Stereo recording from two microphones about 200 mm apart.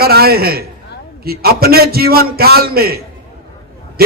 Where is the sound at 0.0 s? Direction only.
50° right (ahead or behind).